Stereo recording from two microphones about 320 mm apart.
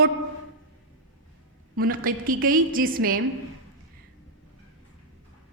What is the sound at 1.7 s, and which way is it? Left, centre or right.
A woman's voice, right.